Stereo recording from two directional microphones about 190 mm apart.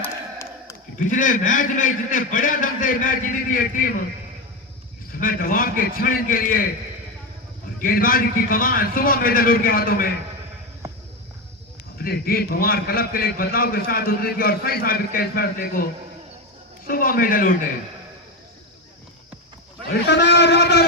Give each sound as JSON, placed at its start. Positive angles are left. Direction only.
{"t": 0.0, "sound": "a sound", "side_deg": 15}
{"t": 0.9, "sound": "a man's voice", "side_deg": 40}
{"t": 5.1, "sound": "a man's voice", "side_deg": 50}
{"t": 7.8, "sound": "a man's voice", "side_deg": 50}
{"t": 11.9, "sound": "a man's voice", "side_deg": 50}
{"t": 19.9, "sound": "a man's voice", "side_deg": 65}